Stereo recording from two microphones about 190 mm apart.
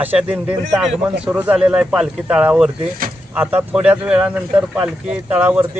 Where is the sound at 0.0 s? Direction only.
10° right (ahead or behind).